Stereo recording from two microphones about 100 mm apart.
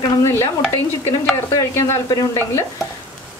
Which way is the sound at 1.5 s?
30° left (ahead or behind).